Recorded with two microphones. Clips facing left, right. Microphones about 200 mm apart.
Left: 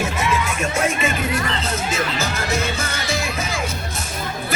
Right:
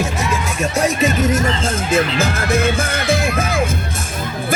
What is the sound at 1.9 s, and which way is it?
Music, 55° right (ahead or behind).